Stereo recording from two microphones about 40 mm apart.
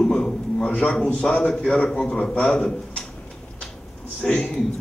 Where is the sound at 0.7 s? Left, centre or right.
Left.